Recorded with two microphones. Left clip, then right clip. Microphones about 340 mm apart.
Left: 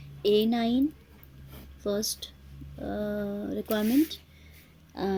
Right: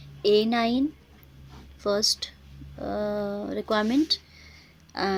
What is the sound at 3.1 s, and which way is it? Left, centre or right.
Speech, right.